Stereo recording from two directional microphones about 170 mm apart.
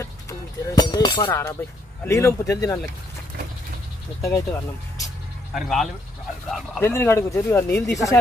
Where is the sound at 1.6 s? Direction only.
10° left (ahead or behind).